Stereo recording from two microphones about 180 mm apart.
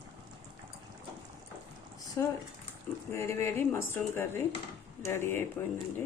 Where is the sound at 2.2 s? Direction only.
15° left (ahead or behind).